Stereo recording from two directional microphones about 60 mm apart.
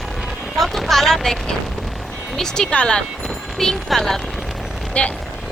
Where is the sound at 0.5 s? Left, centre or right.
Centre.